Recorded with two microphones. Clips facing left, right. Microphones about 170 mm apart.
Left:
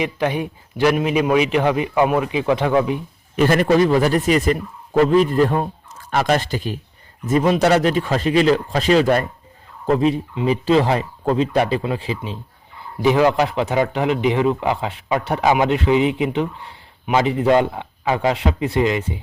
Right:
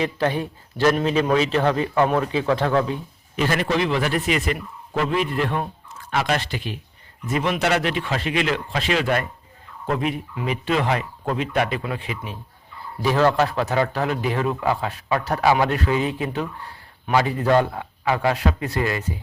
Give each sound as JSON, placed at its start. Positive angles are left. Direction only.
{"t": 0.0, "sound": "a man's voice", "side_deg": 15}
{"t": 3.3, "sound": "speech", "side_deg": 50}
{"t": 13.0, "sound": "a man's voice", "side_deg": 15}